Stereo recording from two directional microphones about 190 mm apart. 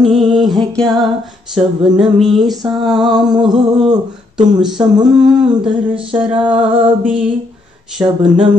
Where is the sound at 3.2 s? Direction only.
20° right (ahead or behind).